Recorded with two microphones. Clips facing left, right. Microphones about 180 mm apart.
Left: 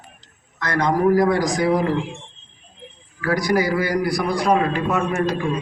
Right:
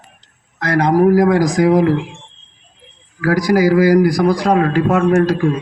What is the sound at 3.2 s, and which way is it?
A man's voice, 90° right.